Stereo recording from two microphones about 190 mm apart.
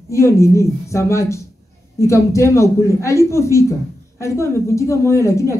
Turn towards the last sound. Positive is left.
turn(degrees=15)  # may be behind; listen again after turning